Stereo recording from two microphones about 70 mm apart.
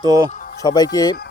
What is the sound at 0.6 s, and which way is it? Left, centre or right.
Speech, left.